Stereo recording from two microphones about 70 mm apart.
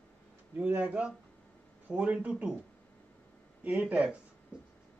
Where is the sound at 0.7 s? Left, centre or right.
Right.